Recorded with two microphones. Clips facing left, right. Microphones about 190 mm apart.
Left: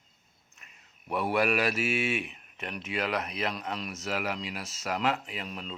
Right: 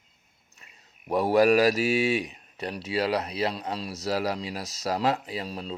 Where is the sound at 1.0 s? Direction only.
35° right (ahead or behind).